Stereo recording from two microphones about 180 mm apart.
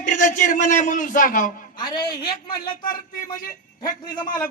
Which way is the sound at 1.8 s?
25° left (ahead or behind).